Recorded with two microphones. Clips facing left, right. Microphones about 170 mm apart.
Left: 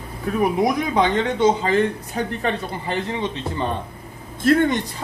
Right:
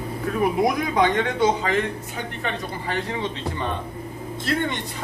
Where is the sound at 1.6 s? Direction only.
35° left (ahead or behind).